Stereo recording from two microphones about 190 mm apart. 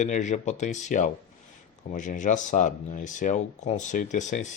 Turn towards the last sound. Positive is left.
turn(degrees=40)  # may be behind; listen again after turning